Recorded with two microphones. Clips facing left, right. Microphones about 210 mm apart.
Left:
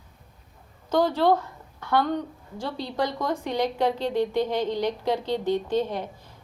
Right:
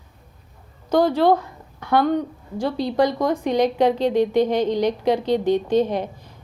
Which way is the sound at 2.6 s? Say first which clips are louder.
Right 8 dB; 15° right (ahead or behind).